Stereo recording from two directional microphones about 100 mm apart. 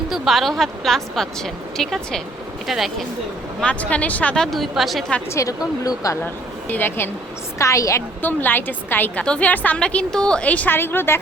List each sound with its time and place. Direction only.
0.1 s a woman's voice: centre (ahead or behind)
3.6 s a woman's voice: 10° left (ahead or behind)
4.5 s a woman's voice: centre (ahead or behind)
5.3 s speech: 35° left (ahead or behind)
6.2 s speech: 20° left (ahead or behind)
7.6 s speech: 30° left (ahead or behind)
8.2 s a woman's voice: 20° left (ahead or behind)